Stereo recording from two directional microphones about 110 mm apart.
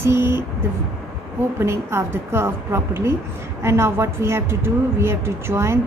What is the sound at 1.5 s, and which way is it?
Speech, 25° right (ahead or behind).